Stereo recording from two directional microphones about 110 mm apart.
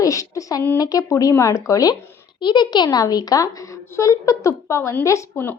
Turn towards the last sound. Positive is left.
turn(degrees=20)  # may be behind; listen again after turning